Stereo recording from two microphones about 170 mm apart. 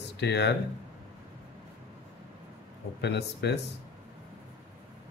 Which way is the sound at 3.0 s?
85° left.